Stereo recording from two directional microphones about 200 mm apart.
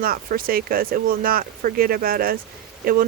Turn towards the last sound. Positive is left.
turn(degrees=-45)  # may be behind; listen again after turning